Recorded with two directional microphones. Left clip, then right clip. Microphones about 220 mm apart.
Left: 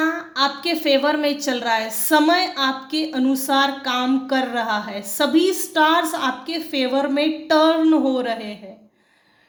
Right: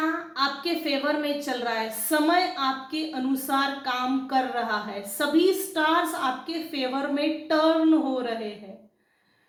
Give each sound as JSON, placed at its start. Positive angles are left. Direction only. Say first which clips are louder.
{"t": 0.3, "sound": "a woman's voice", "louder": "left 7 dB", "side_deg": 50}